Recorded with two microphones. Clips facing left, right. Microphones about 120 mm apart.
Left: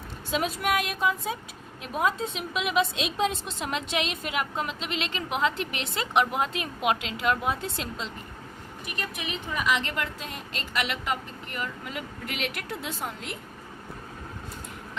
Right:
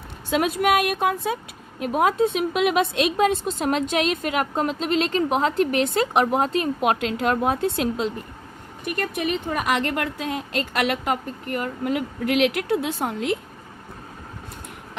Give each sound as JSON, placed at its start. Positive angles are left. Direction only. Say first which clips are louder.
{"t": 0.3, "sound": "a woman's voice", "louder": "right 7 dB", "side_deg": -65}